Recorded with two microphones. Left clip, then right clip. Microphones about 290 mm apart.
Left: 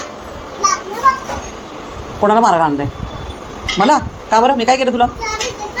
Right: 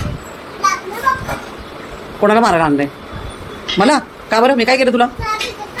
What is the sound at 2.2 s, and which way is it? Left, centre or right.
A woman's voice, centre.